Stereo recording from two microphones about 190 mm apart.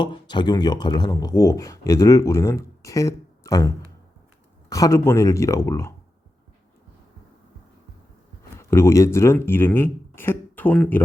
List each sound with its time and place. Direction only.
0.0 s speech: 25° left (ahead or behind)
4.7 s speech: 15° left (ahead or behind)
8.5 s speech: 15° left (ahead or behind)